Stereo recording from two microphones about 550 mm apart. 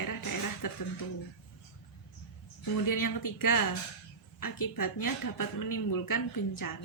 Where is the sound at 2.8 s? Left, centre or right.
Left.